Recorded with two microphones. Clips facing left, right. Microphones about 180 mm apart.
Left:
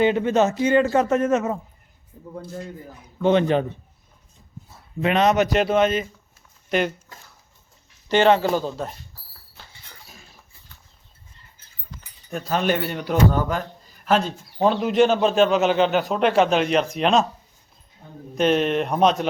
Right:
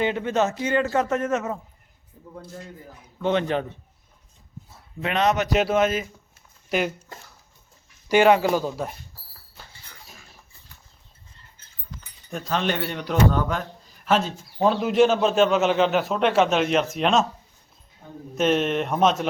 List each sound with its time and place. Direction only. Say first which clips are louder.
0.0 s a man's voice: left 4 dB; 20° left (ahead or behind)
3.2 s a man's voice: left 5 dB; 20° left (ahead or behind)
5.0 s speech: left 4 dB; 15° left (ahead or behind)
5.5 s a man's voice: left 2 dB; 5° right (ahead or behind)
8.0 s speech: even; 10° right (ahead or behind)
12.3 s a man's voice: left 3 dB; 5° left (ahead or behind)
18.3 s a man's voice: left 2 dB; centre (ahead or behind)